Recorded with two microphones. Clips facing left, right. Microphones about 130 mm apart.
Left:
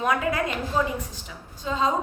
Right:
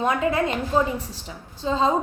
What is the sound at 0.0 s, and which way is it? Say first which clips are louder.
A woman's voice: right 3 dB; 25° right (ahead or behind).